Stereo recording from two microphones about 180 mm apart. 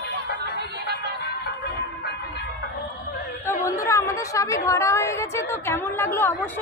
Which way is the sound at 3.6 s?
15° left (ahead or behind).